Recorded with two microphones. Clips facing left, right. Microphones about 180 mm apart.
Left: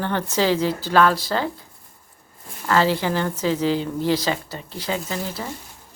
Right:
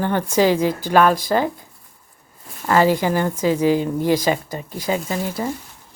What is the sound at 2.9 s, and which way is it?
Speech, 10° right (ahead or behind).